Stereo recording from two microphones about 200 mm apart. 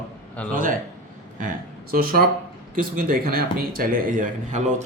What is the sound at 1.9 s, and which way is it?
Speech, 50° right (ahead or behind).